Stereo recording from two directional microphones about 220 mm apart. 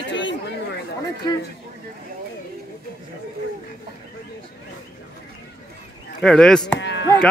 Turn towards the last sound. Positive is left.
turn(degrees=50)  # may be behind; listen again after turning